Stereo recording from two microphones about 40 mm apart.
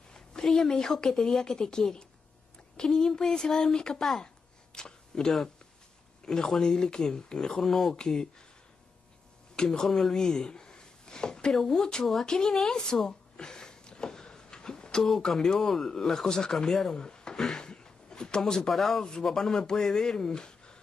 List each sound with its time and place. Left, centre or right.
0.1 s speech: centre
4.7 s a sound: centre
6.2 s speech: centre
8.1 s speech: centre
9.7 s speech: centre
10.5 s a sound: left
11.5 s speech: centre
12.7 s a sound: centre
15.0 s speech: centre
16.9 s a sound: left
18.4 s speech: centre
18.7 s speech: centre; by 20.8 s left